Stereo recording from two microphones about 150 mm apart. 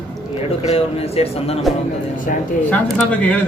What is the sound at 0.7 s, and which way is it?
Speech, 45° left (ahead or behind).